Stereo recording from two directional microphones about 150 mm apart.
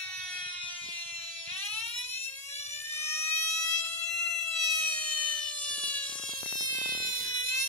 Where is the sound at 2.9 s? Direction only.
15° left (ahead or behind).